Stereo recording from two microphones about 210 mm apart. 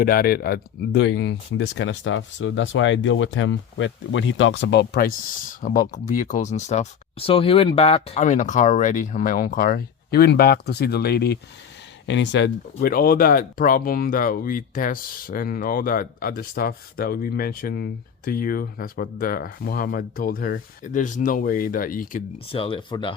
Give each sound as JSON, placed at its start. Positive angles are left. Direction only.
{"t": 0.0, "sound": "speech", "side_deg": 45}
{"t": 22.4, "sound": "speech", "side_deg": 25}